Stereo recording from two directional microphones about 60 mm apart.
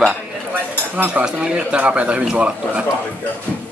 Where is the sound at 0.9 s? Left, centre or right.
Right.